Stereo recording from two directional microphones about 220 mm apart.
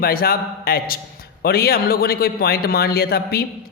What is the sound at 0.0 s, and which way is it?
A man's voice, 45° left (ahead or behind).